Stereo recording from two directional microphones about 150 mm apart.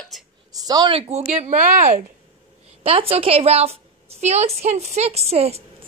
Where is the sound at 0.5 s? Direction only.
25° right (ahead or behind).